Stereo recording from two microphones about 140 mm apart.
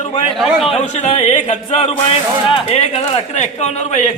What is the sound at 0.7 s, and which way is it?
Speech, 50° left (ahead or behind).